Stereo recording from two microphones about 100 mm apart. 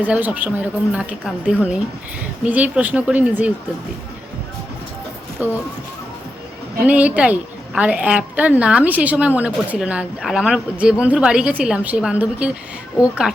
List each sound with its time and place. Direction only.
0.0 s a woman's voice: 15° right (ahead or behind)
5.4 s a woman's voice: 15° right (ahead or behind)
6.8 s a woman's voice: 15° right (ahead or behind)